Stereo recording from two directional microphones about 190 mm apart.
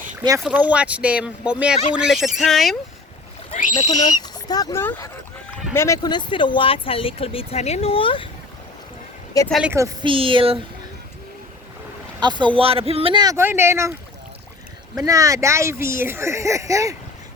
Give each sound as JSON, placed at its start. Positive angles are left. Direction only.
{"t": 0.3, "sound": "speech", "side_deg": -5}
{"t": 3.5, "sound": "speech", "side_deg": 40}
{"t": 4.1, "sound": "speech", "side_deg": 20}
{"t": 9.5, "sound": "speech", "side_deg": -5}
{"t": 9.7, "sound": "speech", "side_deg": -15}
{"t": 10.1, "sound": "speech", "side_deg": -25}
{"t": 12.2, "sound": "speech", "side_deg": -25}
{"t": 14.9, "sound": "speech", "side_deg": -20}